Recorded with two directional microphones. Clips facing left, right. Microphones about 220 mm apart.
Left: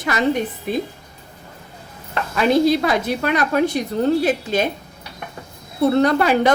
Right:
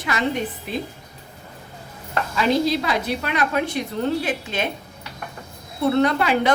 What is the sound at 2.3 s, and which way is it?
A woman's voice, 50° left (ahead or behind).